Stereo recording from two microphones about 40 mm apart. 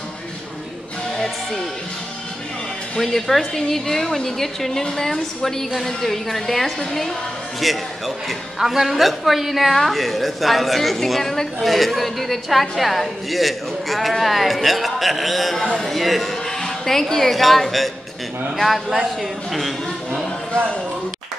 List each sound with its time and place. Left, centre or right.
1.1 s music: centre
3.0 s a woman's voice: centre
15.6 s speech: left
15.9 s speech: centre
16.5 s a sound: centre
17.1 s a woman's voice: centre
19.0 s a man's voice: centre